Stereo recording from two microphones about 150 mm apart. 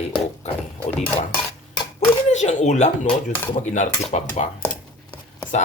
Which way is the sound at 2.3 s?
50° left (ahead or behind).